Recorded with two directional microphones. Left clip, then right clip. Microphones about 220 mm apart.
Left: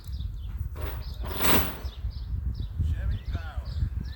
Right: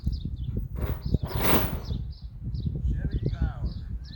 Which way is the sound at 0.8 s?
15° left (ahead or behind).